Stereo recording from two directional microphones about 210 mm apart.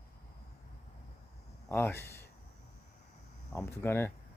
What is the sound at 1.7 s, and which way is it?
Speech, 10° left (ahead or behind).